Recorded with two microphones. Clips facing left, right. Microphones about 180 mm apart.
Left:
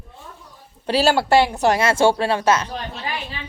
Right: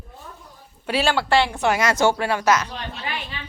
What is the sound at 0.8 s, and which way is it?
A woman's voice, 35° left (ahead or behind).